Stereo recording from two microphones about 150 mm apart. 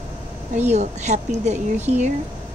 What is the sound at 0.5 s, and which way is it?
A woman's voice, 50° right (ahead or behind).